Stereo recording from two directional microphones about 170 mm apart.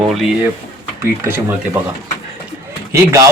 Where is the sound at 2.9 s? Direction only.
15° right (ahead or behind).